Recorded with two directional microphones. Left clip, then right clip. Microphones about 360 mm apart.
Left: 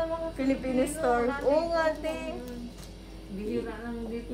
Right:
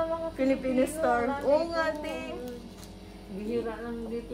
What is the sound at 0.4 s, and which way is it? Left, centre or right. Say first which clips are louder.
A woman's voice: right 2 dB; centre.